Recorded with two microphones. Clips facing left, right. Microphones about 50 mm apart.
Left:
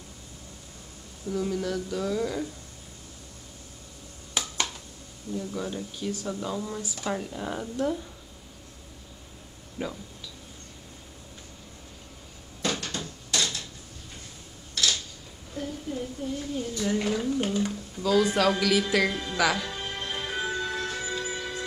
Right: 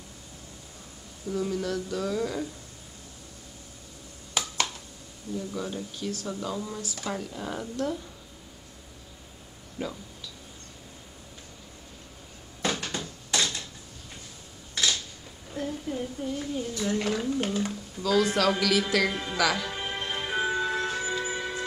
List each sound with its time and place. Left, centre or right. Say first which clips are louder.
1.3 s speech: even; centre
4.4 s a sound: right 1 dB; centre
5.4 s speech: left 1 dB; centre
9.8 s speech: left 1 dB; centre
12.8 s a sound: right 1 dB; centre
15.5 s a sound: right 1 dB; centre
16.5 s speech: left 2 dB; centre
19.0 s speech: even; centre
19.3 s speech: left 1 dB; centre
19.7 s music: right 1 dB; centre